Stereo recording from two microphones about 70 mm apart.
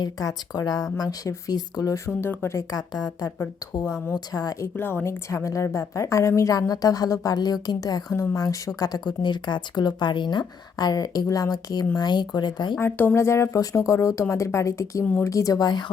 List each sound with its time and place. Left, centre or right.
0.0 s a woman's voice: left
2.0 s speech: left
2.5 s a woman's voice: left
2.9 s speech: left
4.6 s speech: left
5.0 s a woman's voice: left
8.4 s speech: left
11.9 s speech: left
12.8 s speech: left
13.1 s speech: left
13.6 s a woman's voice: left
15.6 s speech: left